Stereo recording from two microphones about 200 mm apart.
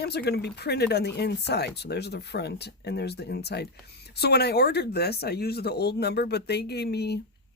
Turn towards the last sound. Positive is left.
turn(degrees=55)  # may be behind; listen again after turning